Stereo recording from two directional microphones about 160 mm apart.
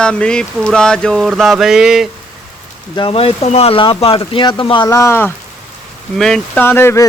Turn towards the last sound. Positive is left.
turn(degrees=15)  # may be behind; listen again after turning